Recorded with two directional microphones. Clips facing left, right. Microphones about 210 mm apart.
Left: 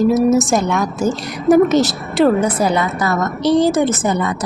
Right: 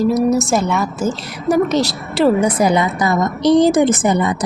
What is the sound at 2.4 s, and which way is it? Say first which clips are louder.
A woman's voice: right 2 dB; 15° right (ahead or behind).